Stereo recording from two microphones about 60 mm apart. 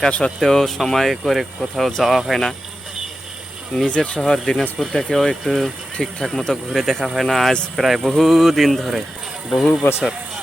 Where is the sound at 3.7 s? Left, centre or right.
Centre.